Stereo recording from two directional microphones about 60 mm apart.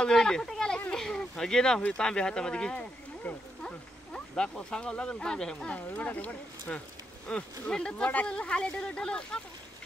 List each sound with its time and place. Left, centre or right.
0.0 s a sound: centre
1.9 s speech: centre
5.8 s speech: left
7.3 s speech: centre